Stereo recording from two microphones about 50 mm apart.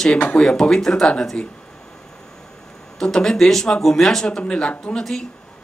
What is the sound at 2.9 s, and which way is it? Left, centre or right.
Speech, centre.